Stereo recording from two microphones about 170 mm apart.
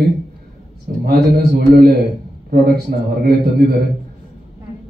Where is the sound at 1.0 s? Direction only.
65° right (ahead or behind).